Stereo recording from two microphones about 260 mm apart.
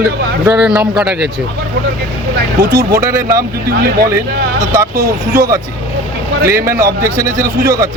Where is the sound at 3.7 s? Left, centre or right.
Right.